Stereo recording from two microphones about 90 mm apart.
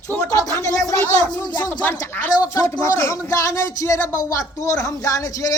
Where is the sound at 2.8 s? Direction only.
30° left (ahead or behind).